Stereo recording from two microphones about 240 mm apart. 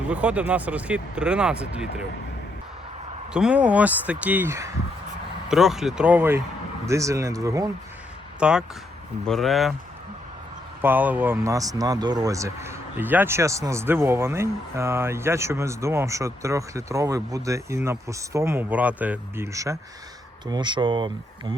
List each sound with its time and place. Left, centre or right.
0.1 s speech: centre
3.3 s speech: centre
10.8 s speech: centre